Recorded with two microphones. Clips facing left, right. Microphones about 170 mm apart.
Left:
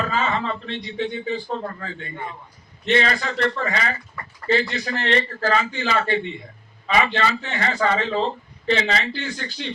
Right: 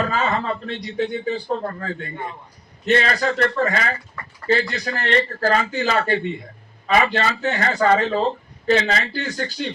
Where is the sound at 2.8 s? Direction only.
40° right (ahead or behind).